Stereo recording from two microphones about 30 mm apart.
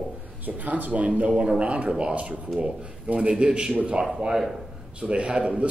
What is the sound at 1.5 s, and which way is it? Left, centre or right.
Speech, right.